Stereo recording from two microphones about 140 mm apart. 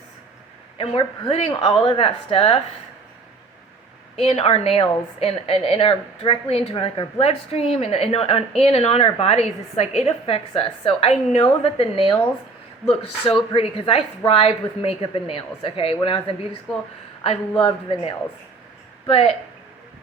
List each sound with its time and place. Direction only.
0.8 s a woman's voice: 40° left (ahead or behind)
4.2 s a woman's voice: 45° left (ahead or behind)
13.5 s a woman's voice: 40° left (ahead or behind)
17.6 s a woman's voice: 40° left (ahead or behind)